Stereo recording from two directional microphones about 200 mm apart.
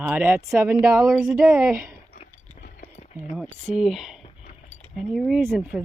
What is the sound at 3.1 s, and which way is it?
Speech, 5° right (ahead or behind).